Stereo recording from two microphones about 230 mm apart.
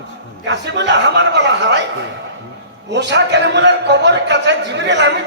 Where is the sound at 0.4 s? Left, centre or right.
Right.